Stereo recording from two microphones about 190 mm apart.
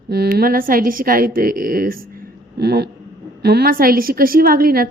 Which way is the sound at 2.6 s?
60° right (ahead or behind).